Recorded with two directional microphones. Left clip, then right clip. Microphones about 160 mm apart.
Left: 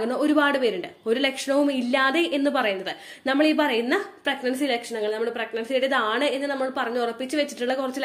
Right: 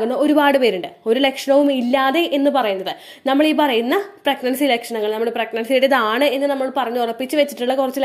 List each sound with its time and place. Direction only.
0.0 s a woman's voice: 30° right (ahead or behind)